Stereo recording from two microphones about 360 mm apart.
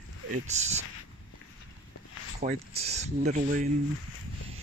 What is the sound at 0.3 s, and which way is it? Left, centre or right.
Speech, centre.